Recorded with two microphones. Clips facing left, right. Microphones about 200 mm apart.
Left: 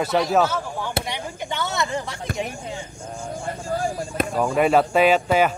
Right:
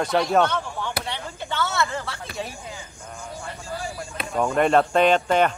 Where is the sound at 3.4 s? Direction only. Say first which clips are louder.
Left 8 dB; 50° left (ahead or behind).